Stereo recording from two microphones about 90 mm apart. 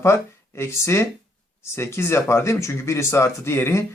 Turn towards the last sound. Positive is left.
turn(degrees=30)  # may be behind; listen again after turning